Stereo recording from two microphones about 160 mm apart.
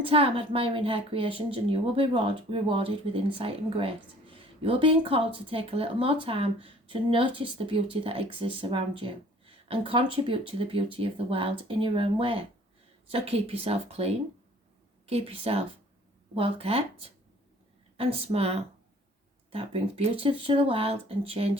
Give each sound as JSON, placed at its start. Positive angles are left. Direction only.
{"t": 0.0, "sound": "a woman's voice", "side_deg": -35}